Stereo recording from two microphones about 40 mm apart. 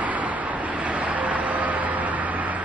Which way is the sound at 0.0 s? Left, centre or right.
Right.